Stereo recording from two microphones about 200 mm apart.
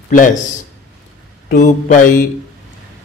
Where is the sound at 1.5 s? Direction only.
40° left (ahead or behind).